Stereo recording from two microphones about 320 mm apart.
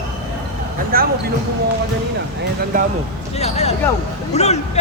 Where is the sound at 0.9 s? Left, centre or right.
Right.